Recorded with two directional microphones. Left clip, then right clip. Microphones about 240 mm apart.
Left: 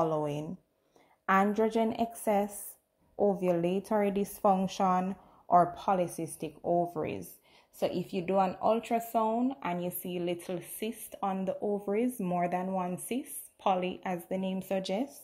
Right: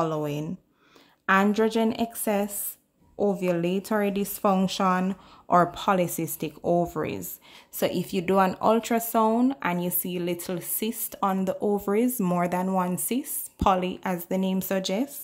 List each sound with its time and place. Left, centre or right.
0.0 s speech: centre